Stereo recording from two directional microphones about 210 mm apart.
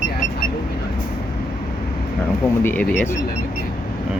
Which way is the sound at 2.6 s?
10° left (ahead or behind).